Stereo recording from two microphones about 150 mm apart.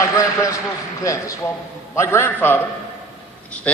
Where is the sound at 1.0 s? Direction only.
20° left (ahead or behind).